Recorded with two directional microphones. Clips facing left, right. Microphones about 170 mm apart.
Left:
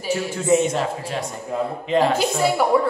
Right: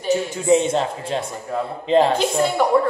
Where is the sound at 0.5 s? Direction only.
25° right (ahead or behind).